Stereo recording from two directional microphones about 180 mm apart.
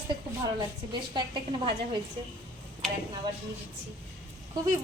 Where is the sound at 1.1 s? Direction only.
25° right (ahead or behind).